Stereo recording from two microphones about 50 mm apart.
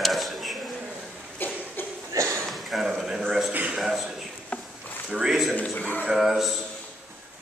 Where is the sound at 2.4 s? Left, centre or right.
Centre.